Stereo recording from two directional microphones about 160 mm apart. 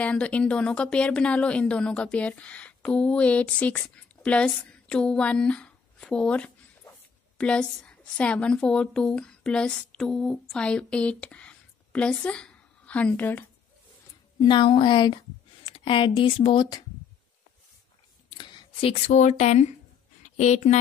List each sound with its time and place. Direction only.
0.0 s a woman's voice: 5° left (ahead or behind)
14.4 s a woman's voice: 30° left (ahead or behind)
18.3 s speech: 30° left (ahead or behind); by 20.8 s 45° left (ahead or behind)